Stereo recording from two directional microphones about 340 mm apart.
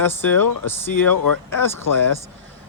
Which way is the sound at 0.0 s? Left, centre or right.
Centre.